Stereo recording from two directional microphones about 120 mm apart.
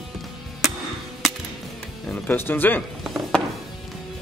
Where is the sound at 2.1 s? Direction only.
15° left (ahead or behind).